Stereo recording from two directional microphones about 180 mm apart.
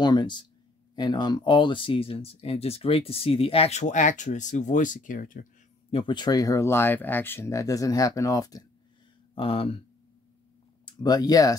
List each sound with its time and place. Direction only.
0.0 s speech: 25° left (ahead or behind); by 5.5 s 50° left (ahead or behind)
5.9 s speech: 30° left (ahead or behind)
9.3 s speech: 30° left (ahead or behind)
10.9 s speech: 20° left (ahead or behind)